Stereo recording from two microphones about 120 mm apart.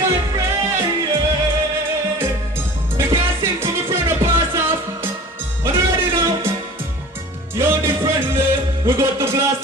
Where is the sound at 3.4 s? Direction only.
20° right (ahead or behind).